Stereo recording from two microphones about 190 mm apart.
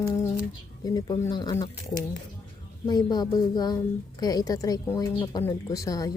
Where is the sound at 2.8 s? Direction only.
20° left (ahead or behind).